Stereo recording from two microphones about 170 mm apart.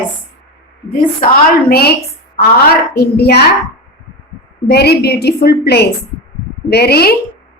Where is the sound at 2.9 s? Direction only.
70° left (ahead or behind).